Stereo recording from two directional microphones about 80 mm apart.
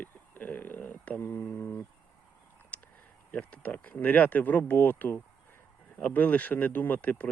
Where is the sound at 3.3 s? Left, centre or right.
Centre.